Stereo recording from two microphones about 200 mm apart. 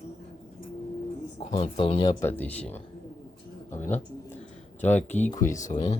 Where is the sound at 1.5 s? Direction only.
25° left (ahead or behind).